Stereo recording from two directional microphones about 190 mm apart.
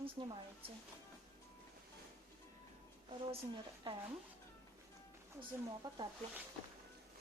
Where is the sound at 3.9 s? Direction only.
25° right (ahead or behind).